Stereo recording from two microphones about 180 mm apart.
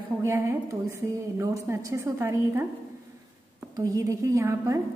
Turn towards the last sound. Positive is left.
turn(degrees=-15)  # may be behind; listen again after turning